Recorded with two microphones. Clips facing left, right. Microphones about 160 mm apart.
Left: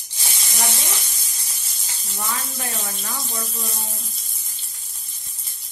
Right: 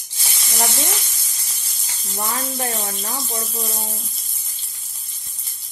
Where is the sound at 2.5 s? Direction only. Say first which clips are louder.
Right 5 dB; 35° right (ahead or behind).